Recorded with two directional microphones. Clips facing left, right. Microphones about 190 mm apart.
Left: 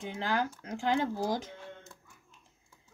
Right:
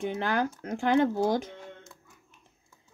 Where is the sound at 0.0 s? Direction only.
60° right (ahead or behind).